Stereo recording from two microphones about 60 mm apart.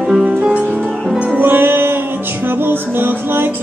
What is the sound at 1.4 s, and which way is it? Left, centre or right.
Music, right.